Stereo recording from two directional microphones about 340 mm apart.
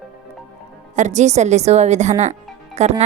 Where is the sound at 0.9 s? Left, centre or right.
Right.